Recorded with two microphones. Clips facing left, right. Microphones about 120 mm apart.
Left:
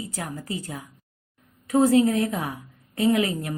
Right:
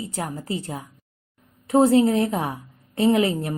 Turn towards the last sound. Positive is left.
turn(degrees=-30)  # may be behind; listen again after turning